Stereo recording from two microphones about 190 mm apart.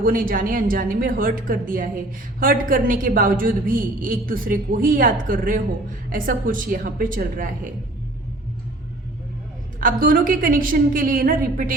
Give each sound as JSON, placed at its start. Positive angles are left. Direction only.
{"t": 0.0, "sound": "a woman's voice", "side_deg": -45}
{"t": 9.8, "sound": "a woman's voice", "side_deg": -45}